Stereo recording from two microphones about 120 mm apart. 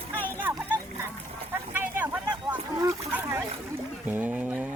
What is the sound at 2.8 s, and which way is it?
Speech, 25° right (ahead or behind).